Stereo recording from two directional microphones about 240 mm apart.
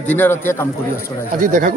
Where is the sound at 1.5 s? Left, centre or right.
Right.